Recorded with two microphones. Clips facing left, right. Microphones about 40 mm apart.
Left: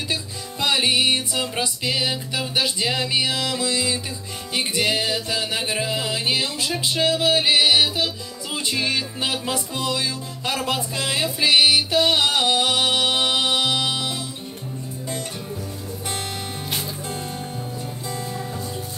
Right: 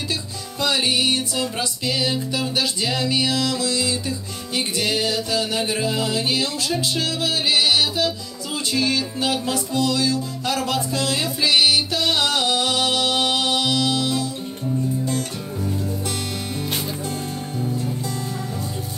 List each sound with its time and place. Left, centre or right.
0.1 s music: left